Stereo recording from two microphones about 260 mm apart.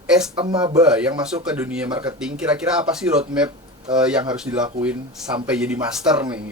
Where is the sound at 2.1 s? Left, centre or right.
Centre.